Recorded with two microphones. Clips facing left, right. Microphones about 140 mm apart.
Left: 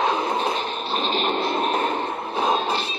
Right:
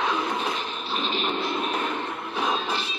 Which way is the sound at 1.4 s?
30° left (ahead or behind).